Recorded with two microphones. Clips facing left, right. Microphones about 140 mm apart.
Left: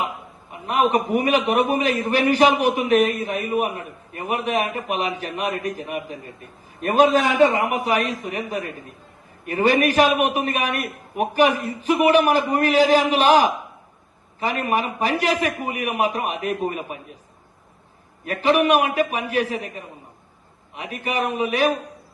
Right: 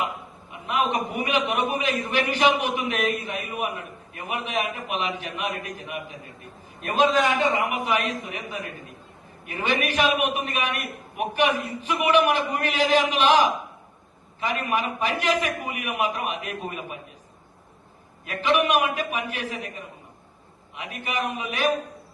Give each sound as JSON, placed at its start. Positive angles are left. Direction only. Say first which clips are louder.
{"t": 0.7, "sound": "a man's voice", "louder": "left 6 dB", "side_deg": 40}
{"t": 14.6, "sound": "a man's voice", "louder": "left 4 dB", "side_deg": 35}
{"t": 18.4, "sound": "a man's voice", "louder": "left 4 dB", "side_deg": 35}